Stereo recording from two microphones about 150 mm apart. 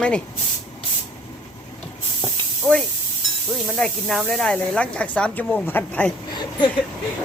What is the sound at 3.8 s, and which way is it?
Speech, 5° left (ahead or behind).